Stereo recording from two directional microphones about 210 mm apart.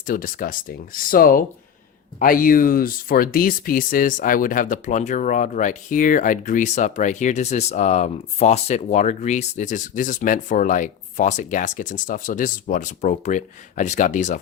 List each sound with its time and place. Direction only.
0.0 s speech: 40° left (ahead or behind)